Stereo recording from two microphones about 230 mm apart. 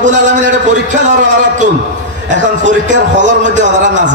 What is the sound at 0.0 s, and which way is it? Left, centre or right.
A man's voice, right.